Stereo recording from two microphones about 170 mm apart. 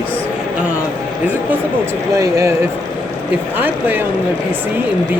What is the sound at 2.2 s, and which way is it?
Speech, 20° right (ahead or behind).